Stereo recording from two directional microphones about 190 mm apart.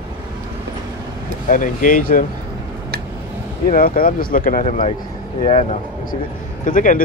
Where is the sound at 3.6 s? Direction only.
50° left (ahead or behind).